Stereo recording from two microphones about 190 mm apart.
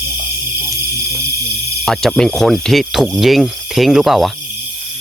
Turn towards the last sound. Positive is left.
turn(degrees=0)  # may be behind; listen again after turning